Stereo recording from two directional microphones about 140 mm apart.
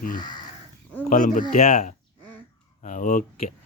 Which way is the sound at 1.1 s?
65° left (ahead or behind).